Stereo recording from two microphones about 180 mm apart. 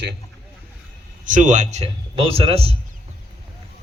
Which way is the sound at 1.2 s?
45° right (ahead or behind).